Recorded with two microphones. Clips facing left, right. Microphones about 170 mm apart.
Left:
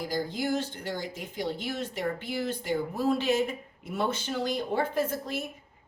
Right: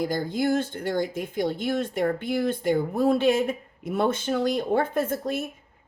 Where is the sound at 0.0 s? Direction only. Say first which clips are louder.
Right 6 dB; 50° right (ahead or behind).